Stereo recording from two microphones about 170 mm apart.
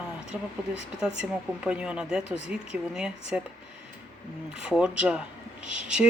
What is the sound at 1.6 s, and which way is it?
Speech, 5° right (ahead or behind).